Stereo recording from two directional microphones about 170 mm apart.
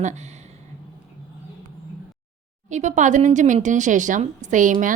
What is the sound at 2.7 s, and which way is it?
A woman's voice, 45° right (ahead or behind).